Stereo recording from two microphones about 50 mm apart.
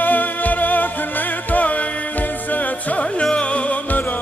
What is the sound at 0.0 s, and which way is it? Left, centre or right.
Music, left.